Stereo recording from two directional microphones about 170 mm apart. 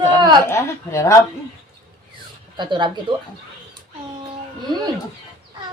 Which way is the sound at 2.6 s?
25° right (ahead or behind).